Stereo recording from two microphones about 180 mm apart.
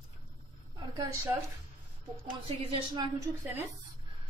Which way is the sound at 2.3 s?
30° right (ahead or behind).